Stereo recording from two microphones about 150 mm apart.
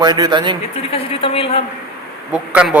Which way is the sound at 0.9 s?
40° left (ahead or behind).